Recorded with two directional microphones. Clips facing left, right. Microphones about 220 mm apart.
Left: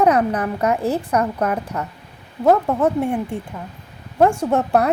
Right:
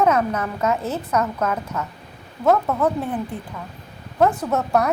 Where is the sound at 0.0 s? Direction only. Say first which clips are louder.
Left 3 dB; 35° left (ahead or behind).